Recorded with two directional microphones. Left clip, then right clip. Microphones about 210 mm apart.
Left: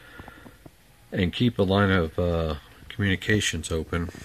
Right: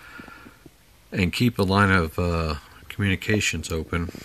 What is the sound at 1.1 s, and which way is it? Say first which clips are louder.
Speech: right 2 dB; 10° right (ahead or behind).